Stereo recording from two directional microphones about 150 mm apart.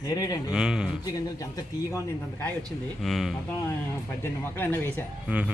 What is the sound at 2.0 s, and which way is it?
Speech, 10° left (ahead or behind).